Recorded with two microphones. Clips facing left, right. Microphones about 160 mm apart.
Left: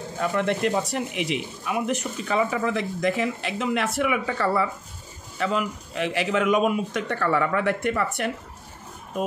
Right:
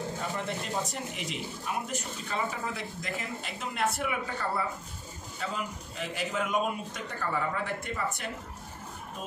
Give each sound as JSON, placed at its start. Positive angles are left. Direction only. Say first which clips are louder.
{"t": 0.2, "sound": "speech", "louder": "left 11 dB", "side_deg": 70}